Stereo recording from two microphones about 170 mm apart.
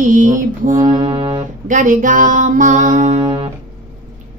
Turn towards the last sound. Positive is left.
turn(degrees=-30)  # may be behind; listen again after turning